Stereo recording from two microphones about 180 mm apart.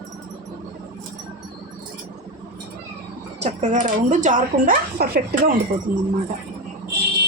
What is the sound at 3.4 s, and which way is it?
Speech, 40° right (ahead or behind).